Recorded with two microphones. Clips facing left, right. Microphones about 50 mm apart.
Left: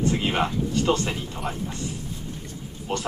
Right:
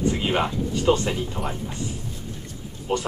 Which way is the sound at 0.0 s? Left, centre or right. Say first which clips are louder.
Even; centre.